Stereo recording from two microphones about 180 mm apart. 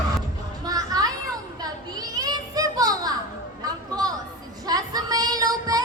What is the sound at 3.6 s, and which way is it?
Chatter, 20° right (ahead or behind).